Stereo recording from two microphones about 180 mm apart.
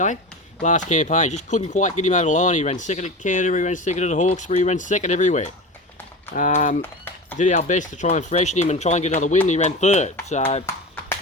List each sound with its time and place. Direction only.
0.6 s speech: 40° left (ahead or behind)